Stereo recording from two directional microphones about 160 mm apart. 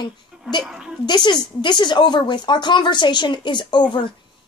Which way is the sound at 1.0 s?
30° left (ahead or behind).